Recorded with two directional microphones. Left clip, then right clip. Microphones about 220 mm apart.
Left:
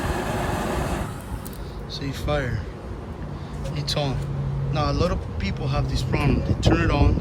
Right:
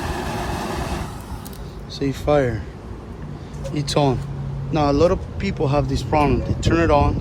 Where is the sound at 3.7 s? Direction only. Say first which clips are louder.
Right 7 dB; 20° right (ahead or behind).